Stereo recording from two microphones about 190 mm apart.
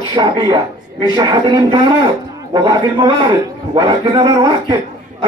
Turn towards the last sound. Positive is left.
turn(degrees=-20)  # may be behind; listen again after turning